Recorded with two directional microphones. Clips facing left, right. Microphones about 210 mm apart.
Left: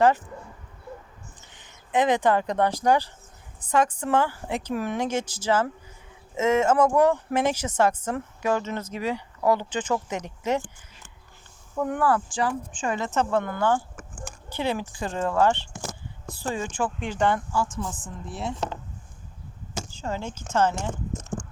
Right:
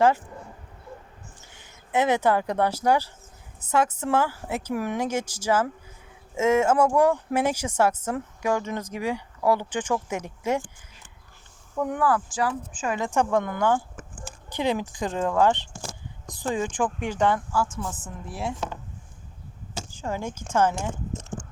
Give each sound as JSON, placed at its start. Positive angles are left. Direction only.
{"t": 1.5, "sound": "speech", "side_deg": -10}
{"t": 11.9, "sound": "speech", "side_deg": -5}
{"t": 19.9, "sound": "speech", "side_deg": -10}